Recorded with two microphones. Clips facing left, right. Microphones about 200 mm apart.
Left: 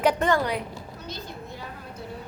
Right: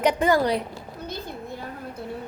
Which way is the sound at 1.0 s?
55° right (ahead or behind).